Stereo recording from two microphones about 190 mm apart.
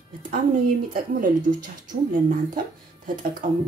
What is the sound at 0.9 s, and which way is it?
Speech, 45° right (ahead or behind).